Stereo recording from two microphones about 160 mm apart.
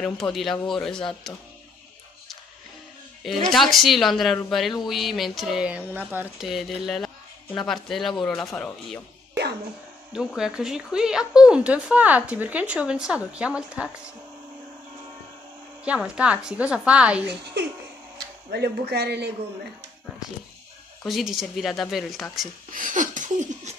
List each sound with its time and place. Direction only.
0.3 s speech: centre (ahead or behind)
3.4 s speech: centre (ahead or behind)
10.1 s speech: 5° right (ahead or behind)
15.8 s speech: 5° right (ahead or behind)
18.5 s speech: 90° right
21.0 s speech: centre (ahead or behind)
22.7 s a sound: 55° right (ahead or behind)